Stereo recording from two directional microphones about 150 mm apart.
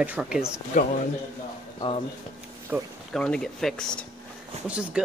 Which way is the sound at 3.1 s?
5° left (ahead or behind).